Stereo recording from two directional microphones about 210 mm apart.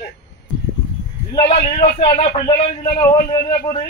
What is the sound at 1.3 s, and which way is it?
A man's voice, 25° left (ahead or behind).